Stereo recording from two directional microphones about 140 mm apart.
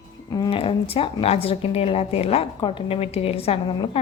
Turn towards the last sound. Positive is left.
turn(degrees=40)  # may be behind; listen again after turning